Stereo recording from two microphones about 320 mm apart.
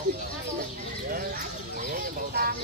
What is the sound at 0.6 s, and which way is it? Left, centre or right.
Speech, right.